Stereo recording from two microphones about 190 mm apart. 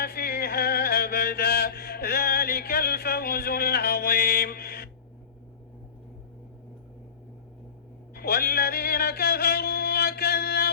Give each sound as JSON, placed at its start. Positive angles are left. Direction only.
{"t": 0.0, "sound": "chant", "side_deg": 55}
{"t": 8.1, "sound": "music", "side_deg": 55}